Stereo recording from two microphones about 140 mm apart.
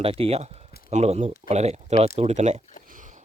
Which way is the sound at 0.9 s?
55° right (ahead or behind).